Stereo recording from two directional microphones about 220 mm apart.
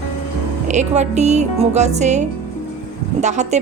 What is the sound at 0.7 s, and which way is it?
Speech, 30° right (ahead or behind).